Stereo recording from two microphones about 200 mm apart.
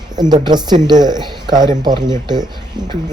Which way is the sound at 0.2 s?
20° right (ahead or behind).